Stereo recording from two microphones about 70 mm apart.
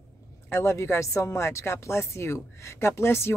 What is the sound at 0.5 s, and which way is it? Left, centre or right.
A woman's voice, left.